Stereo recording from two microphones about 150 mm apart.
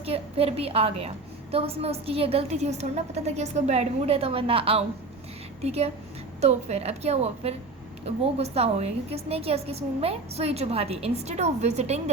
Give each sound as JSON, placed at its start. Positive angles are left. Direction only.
{"t": 0.0, "sound": "a woman's voice", "side_deg": -40}